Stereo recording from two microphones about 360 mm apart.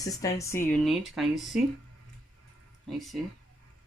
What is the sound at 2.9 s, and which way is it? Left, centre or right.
Speech, centre.